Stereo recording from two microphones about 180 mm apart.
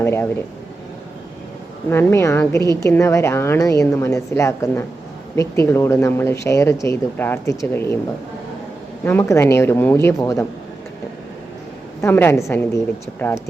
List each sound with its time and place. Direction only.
0.0 s speech: 15° left (ahead or behind)
1.9 s a woman's voice: 10° left (ahead or behind)
9.0 s a woman's voice: 15° left (ahead or behind)
12.0 s a woman's voice: 10° left (ahead or behind)